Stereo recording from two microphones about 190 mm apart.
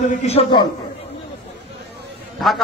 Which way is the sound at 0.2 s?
35° left (ahead or behind).